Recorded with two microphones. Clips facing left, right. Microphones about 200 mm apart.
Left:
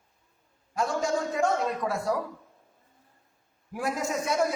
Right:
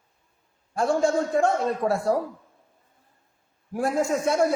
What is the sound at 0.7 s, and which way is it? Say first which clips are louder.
A man's voice: right 6 dB; 30° right (ahead or behind).